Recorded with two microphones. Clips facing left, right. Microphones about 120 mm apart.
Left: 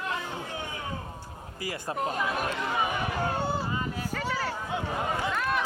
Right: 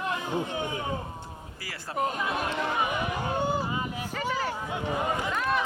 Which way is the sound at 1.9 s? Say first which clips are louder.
Right 2 dB; 5° right (ahead or behind).